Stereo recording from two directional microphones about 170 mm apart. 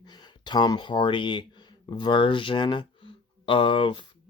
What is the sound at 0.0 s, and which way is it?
Speech, 25° left (ahead or behind).